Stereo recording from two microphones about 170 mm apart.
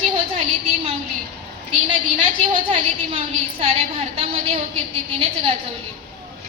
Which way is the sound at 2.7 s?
40° right (ahead or behind).